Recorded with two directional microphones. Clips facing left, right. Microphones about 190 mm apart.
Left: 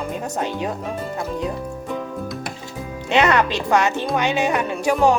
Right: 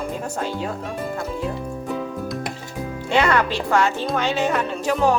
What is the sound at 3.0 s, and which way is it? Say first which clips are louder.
Speech: left 2 dB; 20° left (ahead or behind).